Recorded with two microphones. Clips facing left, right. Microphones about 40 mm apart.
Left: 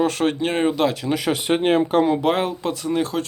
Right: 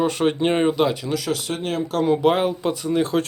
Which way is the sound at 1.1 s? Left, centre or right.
Left.